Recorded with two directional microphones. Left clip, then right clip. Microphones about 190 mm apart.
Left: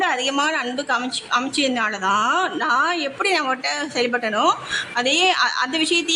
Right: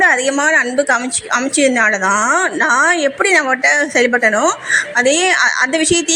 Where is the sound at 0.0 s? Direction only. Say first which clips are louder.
Right 8 dB; 15° right (ahead or behind).